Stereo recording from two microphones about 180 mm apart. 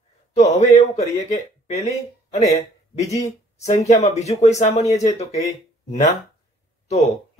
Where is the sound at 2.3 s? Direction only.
40° left (ahead or behind).